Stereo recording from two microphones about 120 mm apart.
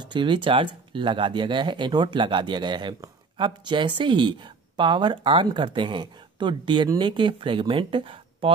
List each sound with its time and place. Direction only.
0.0 s speech: 40° right (ahead or behind)